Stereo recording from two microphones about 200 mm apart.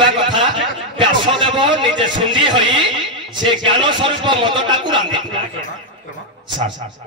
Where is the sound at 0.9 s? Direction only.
25° right (ahead or behind).